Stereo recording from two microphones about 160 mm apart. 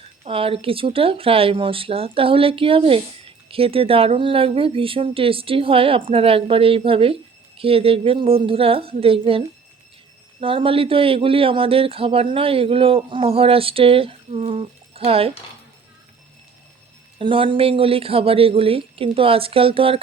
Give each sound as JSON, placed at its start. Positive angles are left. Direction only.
{"t": 0.3, "sound": "speech", "side_deg": -35}
{"t": 10.4, "sound": "speech", "side_deg": -35}
{"t": 17.2, "sound": "speech", "side_deg": -35}